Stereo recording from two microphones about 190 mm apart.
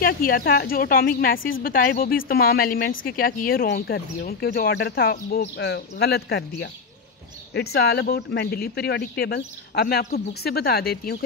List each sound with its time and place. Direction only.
0.0 s speech: 50° left (ahead or behind)